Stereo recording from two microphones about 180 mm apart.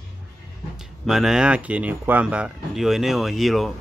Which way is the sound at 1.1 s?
Centre (ahead or behind).